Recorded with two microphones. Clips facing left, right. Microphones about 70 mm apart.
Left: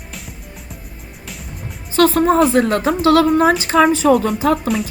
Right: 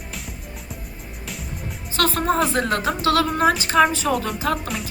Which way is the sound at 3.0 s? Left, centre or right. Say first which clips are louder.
Left 7 dB; left.